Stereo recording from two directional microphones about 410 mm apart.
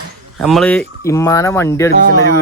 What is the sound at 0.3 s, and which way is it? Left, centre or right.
Speech, centre.